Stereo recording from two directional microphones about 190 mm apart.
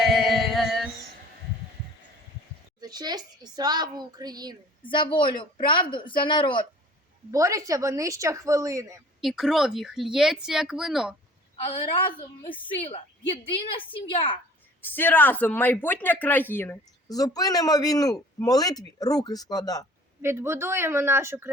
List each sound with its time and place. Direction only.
0.0 s music: centre (ahead or behind)
2.8 s speech: 20° right (ahead or behind)
4.8 s speech: 25° left (ahead or behind)
7.3 s a woman's voice: 15° right (ahead or behind)
9.2 s speech: centre (ahead or behind)
11.5 s a woman's voice: 30° left (ahead or behind)
13.6 s speech: 30° left (ahead or behind)
14.8 s speech: 10° left (ahead or behind)
20.2 s a woman's voice: 15° right (ahead or behind)